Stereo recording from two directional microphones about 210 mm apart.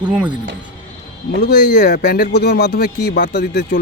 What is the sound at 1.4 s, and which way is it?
Speech, 50° left (ahead or behind).